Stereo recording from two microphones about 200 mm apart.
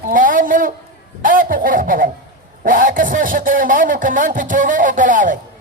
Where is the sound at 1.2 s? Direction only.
45° right (ahead or behind).